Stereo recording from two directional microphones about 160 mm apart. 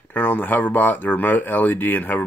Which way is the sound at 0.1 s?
10° left (ahead or behind).